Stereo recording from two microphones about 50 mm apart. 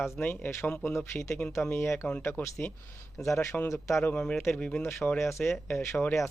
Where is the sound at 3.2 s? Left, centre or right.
Left.